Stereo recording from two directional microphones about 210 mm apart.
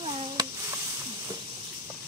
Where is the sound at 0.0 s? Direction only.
25° right (ahead or behind).